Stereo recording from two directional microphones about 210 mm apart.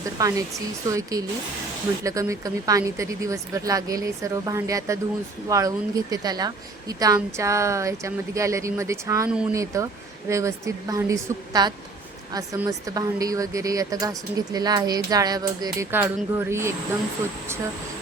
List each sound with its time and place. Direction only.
0.0 s a woman's voice: 15° right (ahead or behind)